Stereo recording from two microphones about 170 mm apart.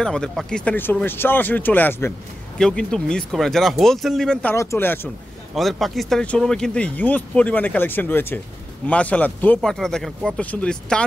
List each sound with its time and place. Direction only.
0.0 s speech: 5° left (ahead or behind)
5.5 s speech: centre (ahead or behind)